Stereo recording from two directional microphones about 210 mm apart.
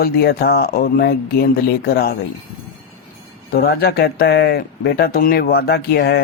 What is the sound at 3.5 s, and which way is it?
Speech, 45° left (ahead or behind).